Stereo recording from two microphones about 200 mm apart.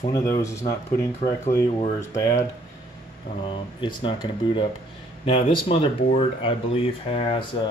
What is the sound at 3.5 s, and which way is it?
Speech, 25° left (ahead or behind).